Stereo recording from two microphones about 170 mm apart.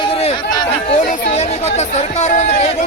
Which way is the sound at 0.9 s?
40° left (ahead or behind).